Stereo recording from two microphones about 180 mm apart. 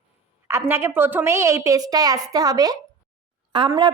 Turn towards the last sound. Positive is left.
turn(degrees=-25)  # may be behind; listen again after turning